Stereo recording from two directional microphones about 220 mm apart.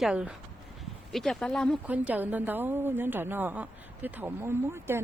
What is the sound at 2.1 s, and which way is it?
A woman's voice, 10° right (ahead or behind).